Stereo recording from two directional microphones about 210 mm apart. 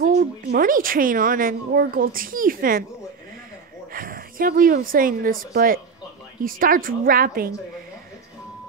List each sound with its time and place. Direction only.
0.0 s speech: 40° right (ahead or behind)
3.9 s a woman's voice: 40° right (ahead or behind)